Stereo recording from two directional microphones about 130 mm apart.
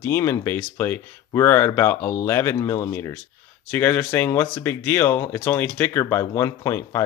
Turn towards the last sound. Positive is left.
turn(degrees=25)  # may be behind; listen again after turning